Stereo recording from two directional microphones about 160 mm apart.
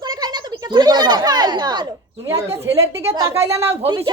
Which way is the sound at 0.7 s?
25° right (ahead or behind).